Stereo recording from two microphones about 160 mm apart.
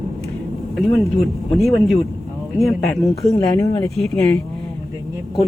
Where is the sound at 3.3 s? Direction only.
20° left (ahead or behind).